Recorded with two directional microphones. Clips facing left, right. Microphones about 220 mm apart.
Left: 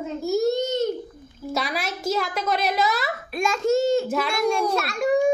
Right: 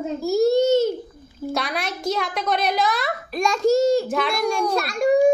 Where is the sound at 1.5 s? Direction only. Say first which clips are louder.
Even; 5° left (ahead or behind).